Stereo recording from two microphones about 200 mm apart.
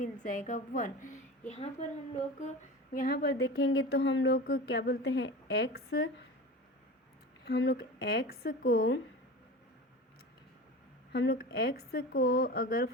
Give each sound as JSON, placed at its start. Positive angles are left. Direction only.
{"t": 0.0, "sound": "a woman's voice", "side_deg": 40}
{"t": 2.9, "sound": "a woman's voice", "side_deg": 45}
{"t": 4.4, "sound": "a woman's voice", "side_deg": 50}
{"t": 7.4, "sound": "a woman's voice", "side_deg": 55}
{"t": 11.1, "sound": "a woman's voice", "side_deg": 55}